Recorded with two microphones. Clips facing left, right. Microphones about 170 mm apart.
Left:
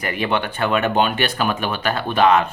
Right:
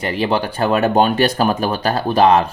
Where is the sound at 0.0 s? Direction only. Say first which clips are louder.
Right 3 dB; 30° right (ahead or behind).